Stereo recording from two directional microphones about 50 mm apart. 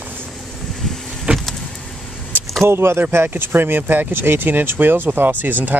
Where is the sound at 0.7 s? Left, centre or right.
Centre.